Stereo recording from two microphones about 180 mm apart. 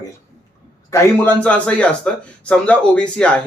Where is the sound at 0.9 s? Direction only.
15° left (ahead or behind).